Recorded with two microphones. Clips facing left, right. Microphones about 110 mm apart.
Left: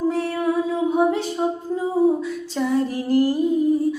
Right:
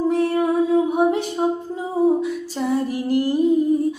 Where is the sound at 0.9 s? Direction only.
15° right (ahead or behind).